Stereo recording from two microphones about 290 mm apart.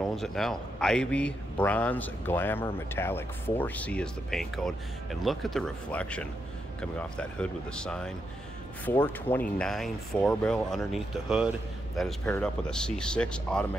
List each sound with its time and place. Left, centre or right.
0.0 s a man's voice: centre